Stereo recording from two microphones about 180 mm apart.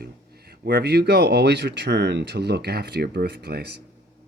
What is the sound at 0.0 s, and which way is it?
Speech, 60° right (ahead or behind).